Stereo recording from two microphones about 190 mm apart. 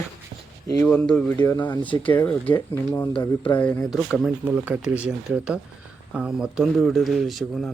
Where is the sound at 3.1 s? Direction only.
30° left (ahead or behind).